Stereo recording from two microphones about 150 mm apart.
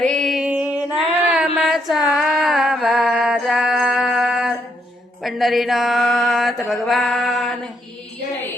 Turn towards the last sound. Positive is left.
turn(degrees=0)  # may be behind; listen again after turning